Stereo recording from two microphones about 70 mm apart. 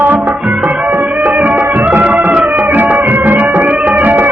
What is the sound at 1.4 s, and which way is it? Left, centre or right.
Music, right.